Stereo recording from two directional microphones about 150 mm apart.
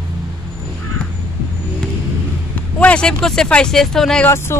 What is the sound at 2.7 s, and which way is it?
Speech, 5° left (ahead or behind).